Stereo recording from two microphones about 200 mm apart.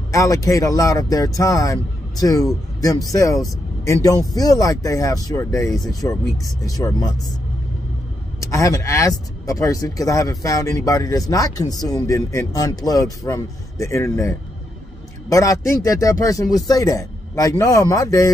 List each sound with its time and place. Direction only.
0.1 s speech: 15° left (ahead or behind)
8.4 s speech: 15° left (ahead or behind)
15.2 s speech: 15° left (ahead or behind)